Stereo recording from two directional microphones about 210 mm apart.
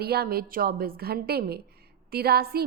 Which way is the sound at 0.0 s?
50° right (ahead or behind).